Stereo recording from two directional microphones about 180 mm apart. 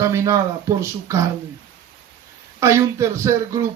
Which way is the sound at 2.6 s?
15° right (ahead or behind).